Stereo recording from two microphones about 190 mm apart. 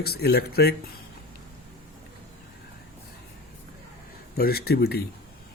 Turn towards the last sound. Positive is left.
turn(degrees=55)  # may be behind; listen again after turning